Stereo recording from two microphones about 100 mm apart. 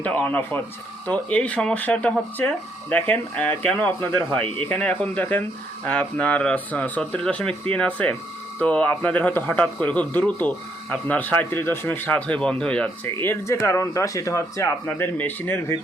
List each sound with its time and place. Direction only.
0.0 s speech: 15° left (ahead or behind)
13.1 s speech: 30° left (ahead or behind)
14.8 s speech: 20° left (ahead or behind)